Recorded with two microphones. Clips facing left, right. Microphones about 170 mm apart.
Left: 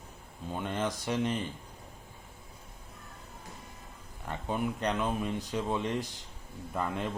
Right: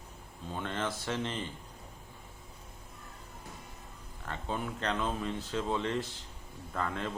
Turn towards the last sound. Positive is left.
turn(degrees=15)  # may be behind; listen again after turning